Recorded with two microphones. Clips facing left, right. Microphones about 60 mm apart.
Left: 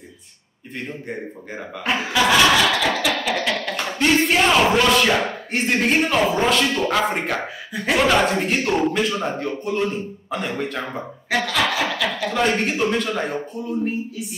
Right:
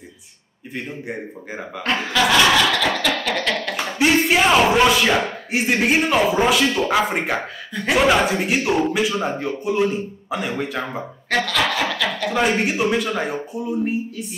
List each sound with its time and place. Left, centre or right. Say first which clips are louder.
0.7 s speech: right 1 dB; centre
1.9 s speech: even; centre